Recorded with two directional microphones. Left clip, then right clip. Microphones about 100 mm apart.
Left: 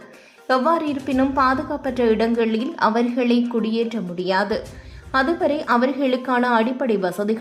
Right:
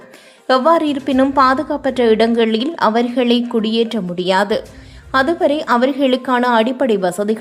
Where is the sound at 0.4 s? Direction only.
35° right (ahead or behind).